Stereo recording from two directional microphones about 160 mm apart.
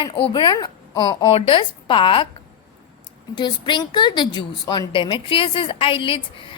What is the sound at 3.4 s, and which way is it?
A woman's voice, 30° left (ahead or behind).